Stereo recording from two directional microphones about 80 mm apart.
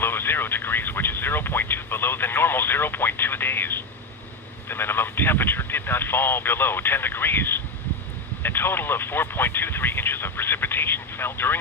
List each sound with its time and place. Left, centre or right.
0.0 s speech: left